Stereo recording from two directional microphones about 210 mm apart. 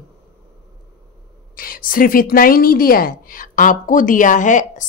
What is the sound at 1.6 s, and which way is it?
A woman's voice, 40° left (ahead or behind).